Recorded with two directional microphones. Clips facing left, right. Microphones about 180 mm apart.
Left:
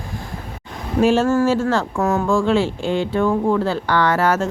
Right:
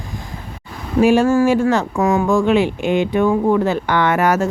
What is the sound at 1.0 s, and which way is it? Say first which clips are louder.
A woman's voice: right 3 dB; 10° right (ahead or behind).